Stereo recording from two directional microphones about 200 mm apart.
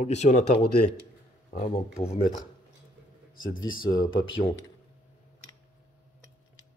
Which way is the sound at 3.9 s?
25° left (ahead or behind).